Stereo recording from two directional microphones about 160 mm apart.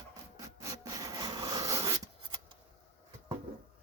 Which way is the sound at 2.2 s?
30° right (ahead or behind).